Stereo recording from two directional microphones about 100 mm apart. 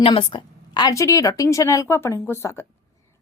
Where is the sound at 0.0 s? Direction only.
60° left (ahead or behind).